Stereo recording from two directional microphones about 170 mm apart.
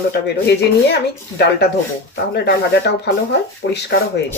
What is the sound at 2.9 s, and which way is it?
Speech, 80° left.